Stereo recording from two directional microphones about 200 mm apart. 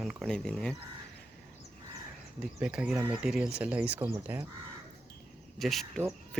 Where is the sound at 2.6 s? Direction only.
5° right (ahead or behind).